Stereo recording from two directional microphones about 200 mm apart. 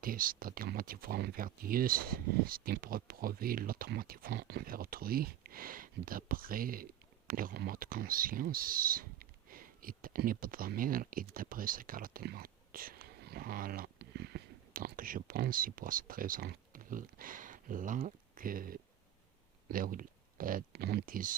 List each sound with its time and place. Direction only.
0.0 s speech: 45° right (ahead or behind)